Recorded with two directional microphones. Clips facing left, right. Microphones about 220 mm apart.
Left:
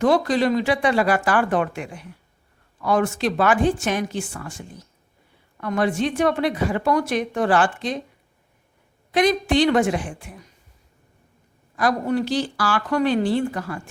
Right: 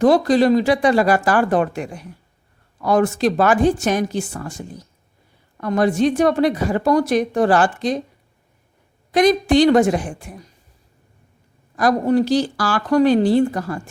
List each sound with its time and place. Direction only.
0.0 s a woman's voice: 35° right (ahead or behind)
9.1 s a woman's voice: 40° right (ahead or behind)
11.8 s a woman's voice: 40° right (ahead or behind)